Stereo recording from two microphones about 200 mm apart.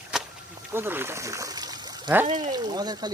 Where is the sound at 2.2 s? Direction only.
35° right (ahead or behind).